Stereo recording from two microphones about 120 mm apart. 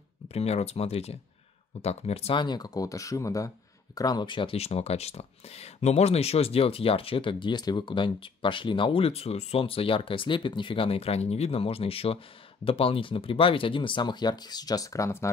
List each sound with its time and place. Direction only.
0.3 s speech: 60° left (ahead or behind)
2.3 s speech: 35° left (ahead or behind)